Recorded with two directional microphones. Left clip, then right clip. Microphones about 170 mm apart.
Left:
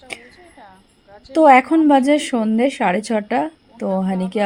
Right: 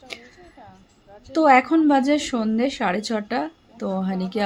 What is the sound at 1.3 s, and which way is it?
A woman's voice, 25° left (ahead or behind).